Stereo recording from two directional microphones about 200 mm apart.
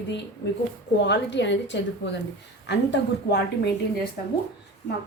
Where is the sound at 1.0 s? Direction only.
60° left (ahead or behind).